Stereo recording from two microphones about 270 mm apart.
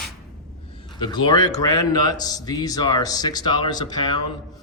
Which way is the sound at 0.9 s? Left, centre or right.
Centre.